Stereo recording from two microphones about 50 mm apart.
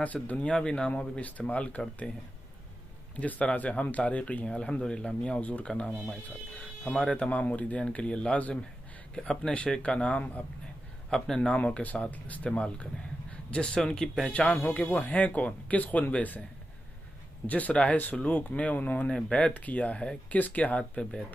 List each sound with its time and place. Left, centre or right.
0.0 s speech: left
0.6 s speech: centre
3.2 s speech: left; by 7.2 s centre
7.2 s speech: left
9.1 s speech: centre
11.1 s speech: centre
11.4 s speech: left
14.3 s speech: left
17.5 s speech: left